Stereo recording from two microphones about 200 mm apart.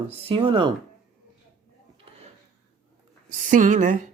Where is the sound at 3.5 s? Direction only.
40° right (ahead or behind).